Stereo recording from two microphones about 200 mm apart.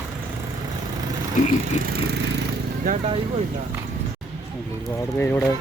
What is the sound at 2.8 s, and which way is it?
Speech, 35° right (ahead or behind).